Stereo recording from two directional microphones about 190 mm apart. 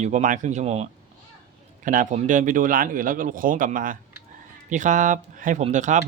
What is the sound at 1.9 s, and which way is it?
Speech, 40° right (ahead or behind).